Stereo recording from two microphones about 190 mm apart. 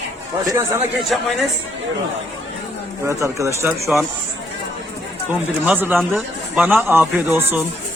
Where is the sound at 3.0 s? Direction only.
15° right (ahead or behind).